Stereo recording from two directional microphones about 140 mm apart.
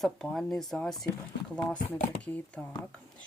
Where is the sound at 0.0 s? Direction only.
Centre (ahead or behind).